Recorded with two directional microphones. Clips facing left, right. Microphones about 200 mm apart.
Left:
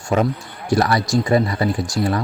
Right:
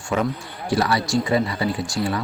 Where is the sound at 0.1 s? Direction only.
45° left (ahead or behind).